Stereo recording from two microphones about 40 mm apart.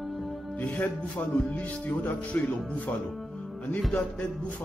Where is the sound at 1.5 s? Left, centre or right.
Left.